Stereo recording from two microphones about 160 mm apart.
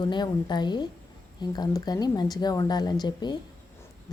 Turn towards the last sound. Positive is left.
turn(degrees=25)  # may be behind; listen again after turning